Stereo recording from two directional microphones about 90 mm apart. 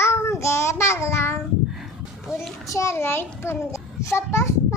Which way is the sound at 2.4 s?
35° left (ahead or behind).